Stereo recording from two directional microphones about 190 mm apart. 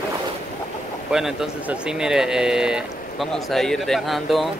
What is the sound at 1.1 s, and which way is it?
Speech, centre (ahead or behind).